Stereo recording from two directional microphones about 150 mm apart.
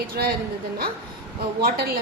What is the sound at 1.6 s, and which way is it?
Speech, 90° right.